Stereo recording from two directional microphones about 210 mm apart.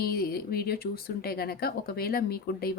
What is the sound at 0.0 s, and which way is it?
Speech, 45° left (ahead or behind).